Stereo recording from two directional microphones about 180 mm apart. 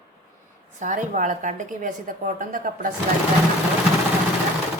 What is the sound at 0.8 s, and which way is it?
A woman's voice, 45° right (ahead or behind).